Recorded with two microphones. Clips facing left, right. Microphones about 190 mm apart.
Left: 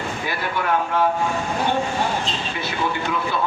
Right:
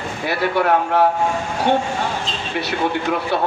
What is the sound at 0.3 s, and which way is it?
Speech, 65° right (ahead or behind).